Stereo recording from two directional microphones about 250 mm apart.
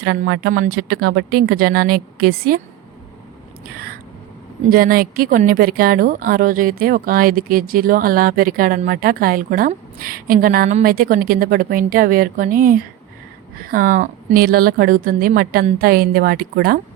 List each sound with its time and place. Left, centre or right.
0.9 s a woman's voice: right
4.7 s a woman's voice: right